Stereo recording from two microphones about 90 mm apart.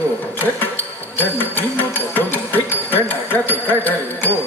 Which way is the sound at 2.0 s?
20° left (ahead or behind).